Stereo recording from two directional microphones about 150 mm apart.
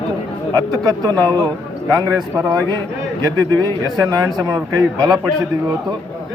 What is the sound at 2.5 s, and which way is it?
A man's voice, 30° right (ahead or behind).